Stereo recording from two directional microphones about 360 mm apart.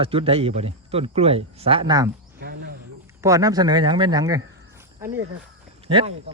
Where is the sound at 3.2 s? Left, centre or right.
Centre.